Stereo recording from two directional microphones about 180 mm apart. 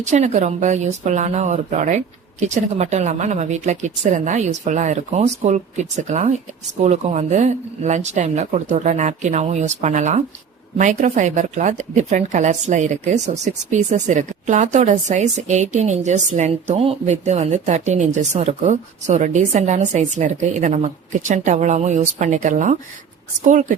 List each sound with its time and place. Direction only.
0.0 s a woman's voice: 40° right (ahead or behind)